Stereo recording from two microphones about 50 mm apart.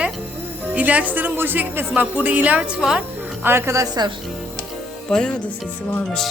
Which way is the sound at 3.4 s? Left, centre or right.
Right.